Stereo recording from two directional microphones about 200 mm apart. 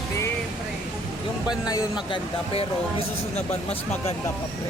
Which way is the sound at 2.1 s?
30° left (ahead or behind).